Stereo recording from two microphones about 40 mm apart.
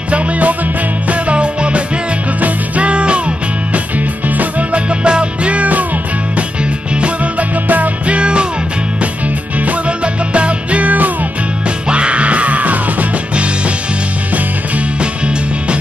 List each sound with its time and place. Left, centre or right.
0.1 s music: right
4.4 s music: right
7.0 s music: right
8.2 s music: right
9.7 s music: right